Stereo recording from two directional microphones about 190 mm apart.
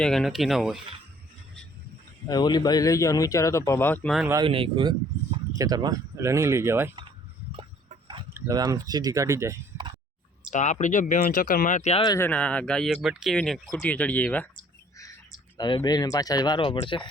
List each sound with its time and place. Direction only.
0.0 s speech: centre (ahead or behind)
2.2 s speech: 20° left (ahead or behind); by 4.3 s centre (ahead or behind)
4.4 s speech: 30° right (ahead or behind); by 6.9 s 15° right (ahead or behind)
8.3 s speech: 15° right (ahead or behind)
10.5 s speech: 40° left (ahead or behind)
12.0 s speech: 15° left (ahead or behind)
15.5 s speech: 20° left (ahead or behind)